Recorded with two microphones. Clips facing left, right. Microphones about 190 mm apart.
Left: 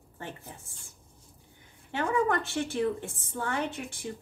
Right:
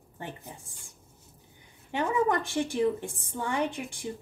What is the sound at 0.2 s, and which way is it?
Speech, 20° right (ahead or behind).